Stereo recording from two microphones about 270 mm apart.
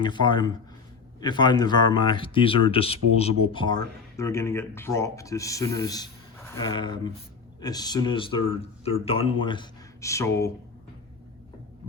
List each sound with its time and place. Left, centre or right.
0.0 s speech: centre